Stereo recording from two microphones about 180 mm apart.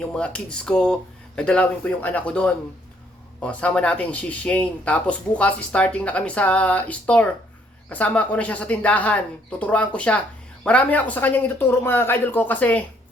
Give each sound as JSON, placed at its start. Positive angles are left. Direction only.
{"t": 0.0, "sound": "speech", "side_deg": 5}